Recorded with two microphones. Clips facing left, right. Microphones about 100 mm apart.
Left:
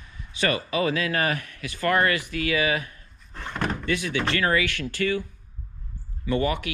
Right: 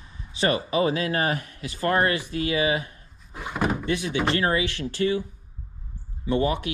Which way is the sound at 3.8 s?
20° right (ahead or behind).